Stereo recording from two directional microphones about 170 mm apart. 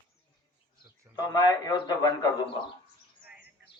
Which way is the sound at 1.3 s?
25° left (ahead or behind).